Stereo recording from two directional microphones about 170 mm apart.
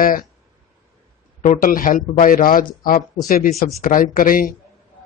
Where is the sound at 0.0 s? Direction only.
55° left (ahead or behind).